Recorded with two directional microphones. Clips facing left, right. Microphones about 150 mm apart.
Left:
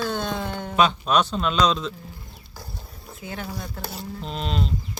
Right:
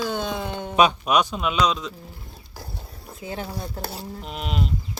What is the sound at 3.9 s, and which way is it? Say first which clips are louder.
Speech: left 1 dB; 10° right (ahead or behind).